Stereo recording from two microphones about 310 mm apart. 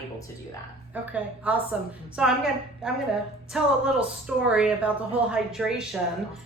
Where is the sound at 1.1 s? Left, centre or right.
Centre.